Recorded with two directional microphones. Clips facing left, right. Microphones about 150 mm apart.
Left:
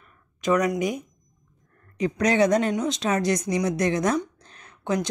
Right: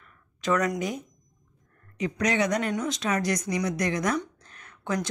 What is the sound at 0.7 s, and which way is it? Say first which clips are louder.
Speech: left 4 dB; 15° left (ahead or behind).